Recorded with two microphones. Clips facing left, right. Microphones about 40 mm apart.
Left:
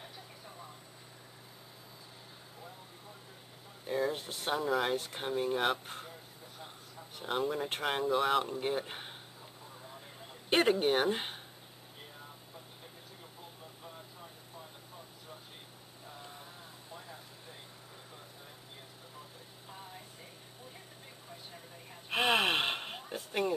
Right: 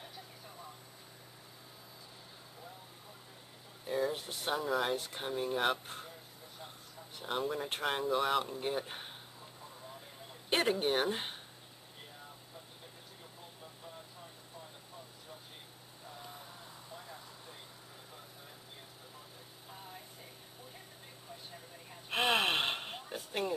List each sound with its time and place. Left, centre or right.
3.8 s speech: centre
7.2 s speech: centre
8.5 s speech: centre
10.5 s speech: centre
22.1 s gasp: centre